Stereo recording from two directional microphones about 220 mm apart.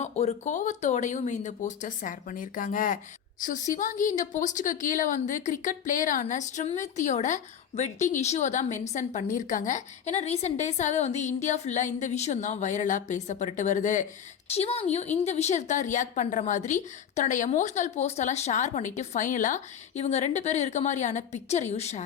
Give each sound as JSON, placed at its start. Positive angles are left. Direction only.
{"t": 0.0, "sound": "a woman's voice", "side_deg": 30}